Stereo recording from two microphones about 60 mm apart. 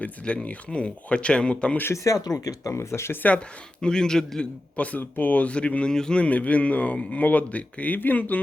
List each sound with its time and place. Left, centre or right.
0.4 s speech: centre
2.0 s speech: left
2.7 s speech: left
3.2 s a man's voice: centre
4.8 s speech: left